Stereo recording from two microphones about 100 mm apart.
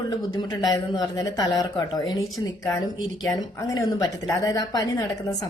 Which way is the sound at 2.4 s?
30° left (ahead or behind).